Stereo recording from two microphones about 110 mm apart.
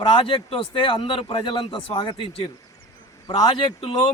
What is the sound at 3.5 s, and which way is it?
Speech, 50° left (ahead or behind).